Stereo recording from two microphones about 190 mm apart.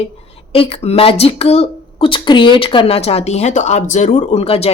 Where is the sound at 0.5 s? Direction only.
30° left (ahead or behind).